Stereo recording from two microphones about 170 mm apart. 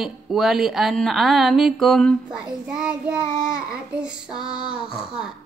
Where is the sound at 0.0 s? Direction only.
Centre (ahead or behind).